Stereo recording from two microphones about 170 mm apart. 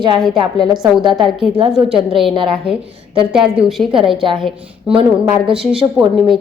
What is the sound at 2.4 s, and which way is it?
A woman's voice, 5° right (ahead or behind).